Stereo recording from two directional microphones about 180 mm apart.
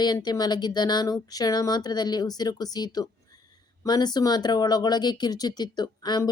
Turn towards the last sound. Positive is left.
turn(degrees=25)  # may be behind; listen again after turning